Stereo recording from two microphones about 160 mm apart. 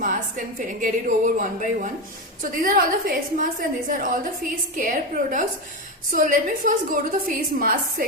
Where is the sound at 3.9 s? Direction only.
55° right (ahead or behind).